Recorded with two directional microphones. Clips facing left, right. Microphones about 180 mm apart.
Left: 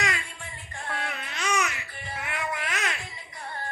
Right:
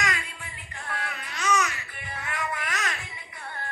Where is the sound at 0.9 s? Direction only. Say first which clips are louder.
Left 1 dB; 20° left (ahead or behind).